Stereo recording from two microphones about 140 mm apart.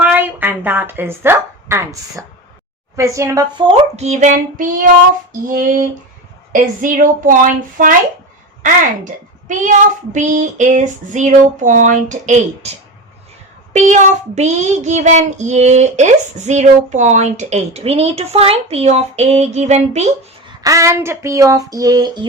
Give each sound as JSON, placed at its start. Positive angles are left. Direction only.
{"t": 0.0, "sound": "speech", "side_deg": -10}
{"t": 2.9, "sound": "a sound", "side_deg": -20}
{"t": 3.7, "sound": "child singing", "side_deg": -50}
{"t": 6.5, "sound": "speech", "side_deg": -70}
{"t": 9.5, "sound": "child singing", "side_deg": -65}
{"t": 12.6, "sound": "a woman's voice", "side_deg": -50}
{"t": 13.7, "sound": "child singing", "side_deg": -60}
{"t": 20.6, "sound": "a sound", "side_deg": -25}